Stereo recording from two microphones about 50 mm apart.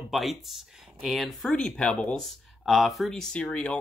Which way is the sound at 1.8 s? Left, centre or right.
Centre.